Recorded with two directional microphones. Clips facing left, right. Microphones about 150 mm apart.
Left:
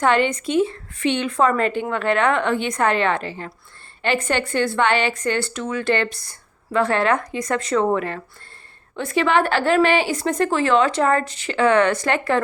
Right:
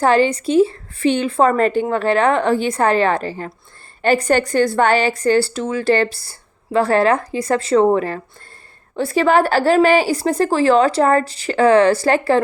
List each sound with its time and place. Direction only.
0.0 s speech: 35° right (ahead or behind)